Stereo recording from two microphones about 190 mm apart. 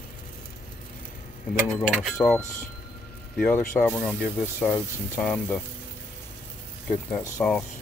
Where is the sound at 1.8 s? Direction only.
Centre (ahead or behind).